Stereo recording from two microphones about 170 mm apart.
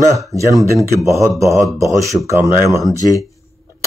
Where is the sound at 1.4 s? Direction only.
15° right (ahead or behind).